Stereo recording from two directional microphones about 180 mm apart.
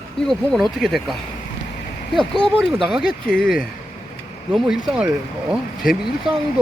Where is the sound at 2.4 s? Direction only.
Centre (ahead or behind).